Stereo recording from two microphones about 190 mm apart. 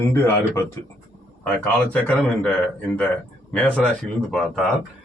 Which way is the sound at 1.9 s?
5° left (ahead or behind).